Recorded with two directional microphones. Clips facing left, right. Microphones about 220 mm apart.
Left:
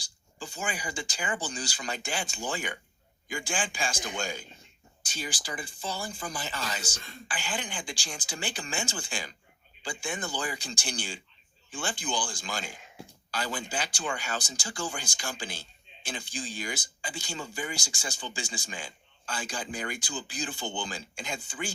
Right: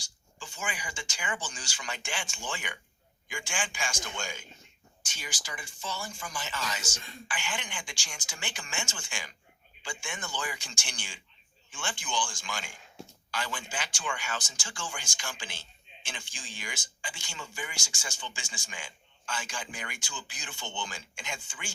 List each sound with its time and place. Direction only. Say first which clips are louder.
0.0 s speech: left 6 dB; 35° left (ahead or behind)